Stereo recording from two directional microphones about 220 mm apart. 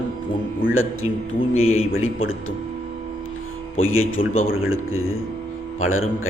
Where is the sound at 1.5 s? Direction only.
70° left (ahead or behind).